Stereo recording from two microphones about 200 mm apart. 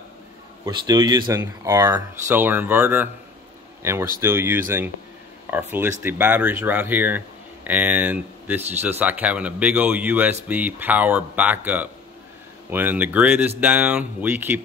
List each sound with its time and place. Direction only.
0.7 s speech: 20° right (ahead or behind)